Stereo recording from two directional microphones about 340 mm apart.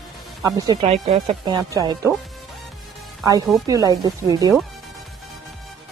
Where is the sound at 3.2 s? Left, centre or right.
Centre.